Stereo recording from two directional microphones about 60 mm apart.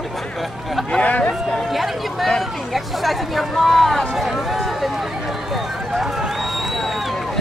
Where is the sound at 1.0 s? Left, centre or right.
Left.